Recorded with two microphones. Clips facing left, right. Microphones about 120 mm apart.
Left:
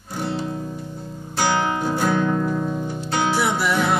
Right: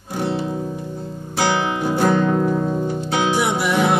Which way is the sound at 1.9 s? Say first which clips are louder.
Right 6 dB; centre (ahead or behind).